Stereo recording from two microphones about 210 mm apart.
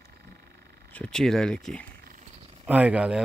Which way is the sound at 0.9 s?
5° left (ahead or behind).